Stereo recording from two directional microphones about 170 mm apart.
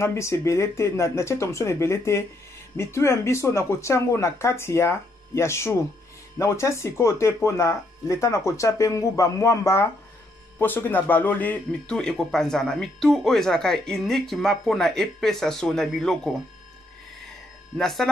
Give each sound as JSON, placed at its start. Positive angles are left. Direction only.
{"t": 0.0, "sound": "speech", "side_deg": 15}
{"t": 17.7, "sound": "speech", "side_deg": 0}